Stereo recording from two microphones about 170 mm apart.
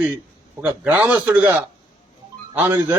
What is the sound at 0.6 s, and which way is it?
A man's voice, 10° right (ahead or behind).